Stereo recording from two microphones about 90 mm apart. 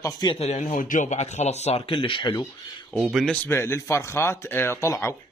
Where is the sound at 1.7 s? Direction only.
80° left.